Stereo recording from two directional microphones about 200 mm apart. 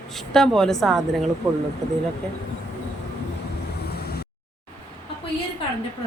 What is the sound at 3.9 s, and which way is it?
Vehicle, 50° left (ahead or behind).